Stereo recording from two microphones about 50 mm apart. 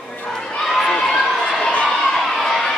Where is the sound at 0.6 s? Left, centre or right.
Centre.